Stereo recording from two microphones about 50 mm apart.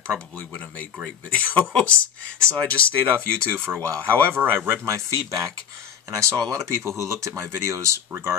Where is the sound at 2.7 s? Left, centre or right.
Left.